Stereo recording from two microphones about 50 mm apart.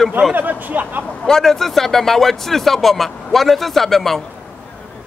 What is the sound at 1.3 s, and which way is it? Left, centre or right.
Speech, centre.